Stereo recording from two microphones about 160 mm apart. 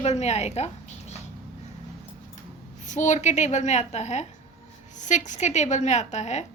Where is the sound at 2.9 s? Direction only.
50° left (ahead or behind).